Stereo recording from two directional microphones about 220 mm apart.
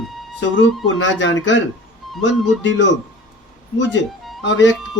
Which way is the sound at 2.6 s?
55° left (ahead or behind).